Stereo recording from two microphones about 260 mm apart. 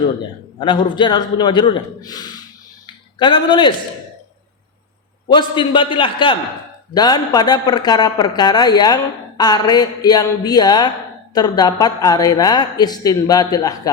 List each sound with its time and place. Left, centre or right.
0.6 s speech: centre
2.8 s a sound: centre
5.3 s a man's voice: centre